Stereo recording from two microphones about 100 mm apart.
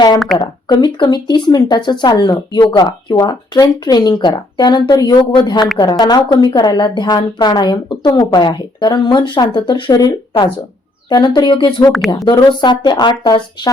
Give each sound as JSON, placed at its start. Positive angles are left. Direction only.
{"t": 0.3, "sound": "speech", "side_deg": 50}
{"t": 11.1, "sound": "speech", "side_deg": 45}